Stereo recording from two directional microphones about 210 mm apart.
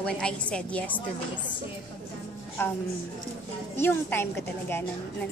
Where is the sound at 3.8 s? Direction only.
10° left (ahead or behind).